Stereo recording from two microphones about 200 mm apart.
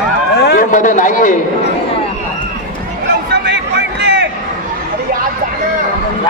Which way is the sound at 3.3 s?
55° right (ahead or behind).